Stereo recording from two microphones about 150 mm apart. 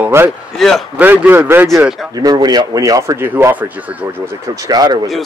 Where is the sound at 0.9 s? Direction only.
10° right (ahead or behind).